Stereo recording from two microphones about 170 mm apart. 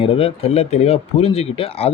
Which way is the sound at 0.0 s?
35° left (ahead or behind).